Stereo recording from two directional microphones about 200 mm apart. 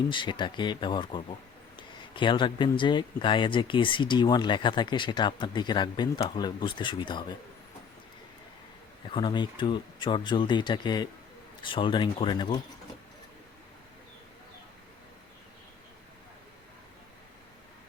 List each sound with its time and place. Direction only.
0.1 s speech: 25° left (ahead or behind)
9.0 s speech: 25° left (ahead or behind)